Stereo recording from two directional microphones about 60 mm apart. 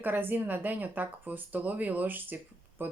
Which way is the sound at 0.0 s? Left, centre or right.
Right.